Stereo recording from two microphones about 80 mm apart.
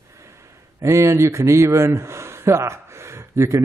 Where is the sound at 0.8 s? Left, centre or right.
Right.